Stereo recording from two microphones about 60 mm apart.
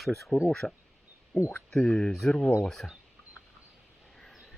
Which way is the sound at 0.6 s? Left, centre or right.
Left.